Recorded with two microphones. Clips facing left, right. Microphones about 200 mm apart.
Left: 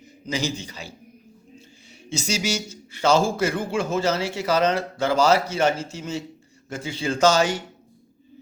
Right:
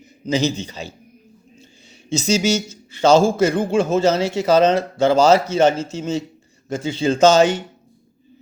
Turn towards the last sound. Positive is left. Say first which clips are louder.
# right 6 dB
turn(degrees=-20)  # may be behind; listen again after turning